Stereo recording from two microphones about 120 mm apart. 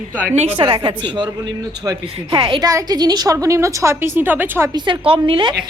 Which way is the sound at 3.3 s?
25° right (ahead or behind).